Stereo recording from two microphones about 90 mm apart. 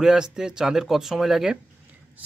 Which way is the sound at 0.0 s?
5° right (ahead or behind).